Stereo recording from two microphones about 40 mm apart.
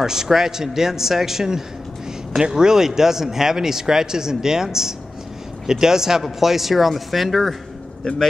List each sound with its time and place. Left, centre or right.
0.0 s speech: centre
8.0 s speech: centre